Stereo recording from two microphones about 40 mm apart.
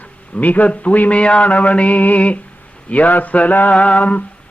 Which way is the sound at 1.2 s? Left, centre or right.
Left.